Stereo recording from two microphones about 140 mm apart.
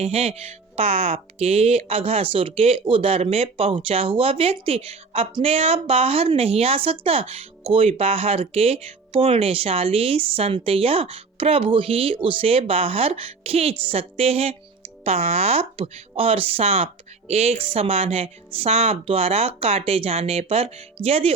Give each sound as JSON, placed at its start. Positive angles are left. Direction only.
{"t": 0.0, "sound": "speech", "side_deg": -45}